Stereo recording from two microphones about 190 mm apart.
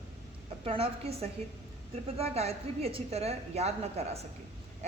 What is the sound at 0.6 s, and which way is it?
A woman's voice, 30° right (ahead or behind).